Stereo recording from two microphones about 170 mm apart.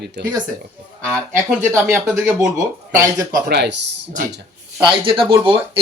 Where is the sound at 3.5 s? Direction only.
85° right.